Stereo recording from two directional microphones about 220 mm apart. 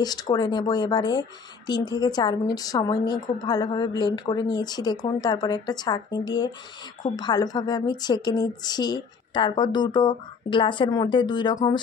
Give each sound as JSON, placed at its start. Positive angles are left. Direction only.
{"t": 0.0, "sound": "a woman's voice", "side_deg": 20}